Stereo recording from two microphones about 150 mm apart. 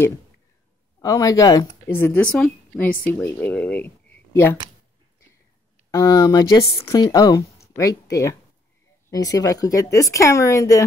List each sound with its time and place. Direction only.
0.9 s speech: 25° left (ahead or behind)
2.0 s a woman's voice: 15° left (ahead or behind)
5.9 s speech: 25° left (ahead or behind)